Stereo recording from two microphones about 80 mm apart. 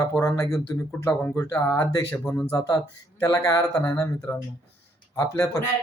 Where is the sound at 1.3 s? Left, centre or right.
Left.